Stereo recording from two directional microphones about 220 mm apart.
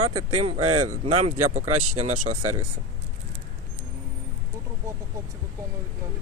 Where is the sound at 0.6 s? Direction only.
90° right.